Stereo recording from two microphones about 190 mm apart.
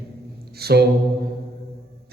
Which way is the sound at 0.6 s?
60° right (ahead or behind).